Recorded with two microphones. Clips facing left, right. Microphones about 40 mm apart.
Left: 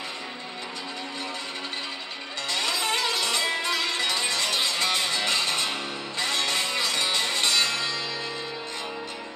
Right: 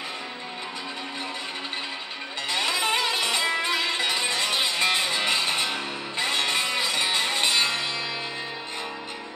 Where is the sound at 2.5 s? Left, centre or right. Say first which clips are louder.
Right 2 dB; right.